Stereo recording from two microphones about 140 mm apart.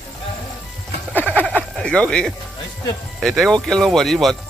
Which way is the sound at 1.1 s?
10° left (ahead or behind).